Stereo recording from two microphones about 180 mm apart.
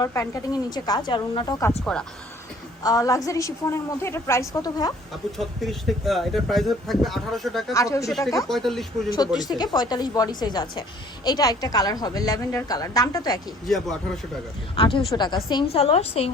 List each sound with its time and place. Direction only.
0.0 s a woman's voice: 15° left (ahead or behind)
1.8 s speech: 5° left (ahead or behind)
2.8 s a woman's voice: 20° left (ahead or behind)
5.4 s speech: centre (ahead or behind)
7.7 s a woman's voice: 15° left (ahead or behind)
8.4 s speech: centre (ahead or behind)
9.5 s a woman's voice: 20° left (ahead or behind)
13.7 s speech: centre (ahead or behind)
14.8 s a woman's voice: 30° left (ahead or behind)